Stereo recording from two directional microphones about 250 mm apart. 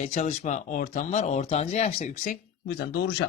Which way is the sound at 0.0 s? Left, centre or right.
Left.